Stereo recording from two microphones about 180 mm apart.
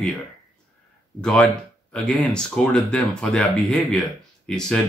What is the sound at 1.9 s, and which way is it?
Speech, 5° left (ahead or behind).